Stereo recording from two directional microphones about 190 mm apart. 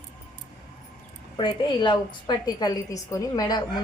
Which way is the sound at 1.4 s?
25° left (ahead or behind).